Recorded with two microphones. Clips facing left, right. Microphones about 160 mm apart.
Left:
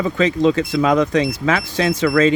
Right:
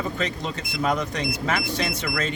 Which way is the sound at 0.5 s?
90° left.